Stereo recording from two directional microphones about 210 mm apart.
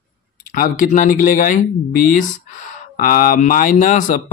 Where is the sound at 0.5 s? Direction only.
40° left (ahead or behind).